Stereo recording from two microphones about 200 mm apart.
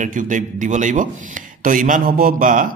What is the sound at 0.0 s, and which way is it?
A man's voice, 40° right (ahead or behind).